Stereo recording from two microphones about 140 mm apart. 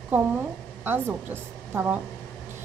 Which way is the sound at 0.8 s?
15° right (ahead or behind).